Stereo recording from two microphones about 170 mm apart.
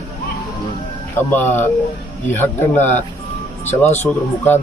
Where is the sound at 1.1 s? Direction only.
10° left (ahead or behind).